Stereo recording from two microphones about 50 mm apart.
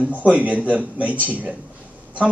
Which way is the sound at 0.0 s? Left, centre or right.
Right.